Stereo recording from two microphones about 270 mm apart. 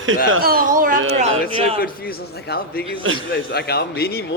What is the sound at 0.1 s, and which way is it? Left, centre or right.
Speech, right.